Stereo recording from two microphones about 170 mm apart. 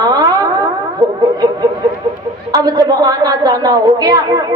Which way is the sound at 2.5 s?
20° right (ahead or behind).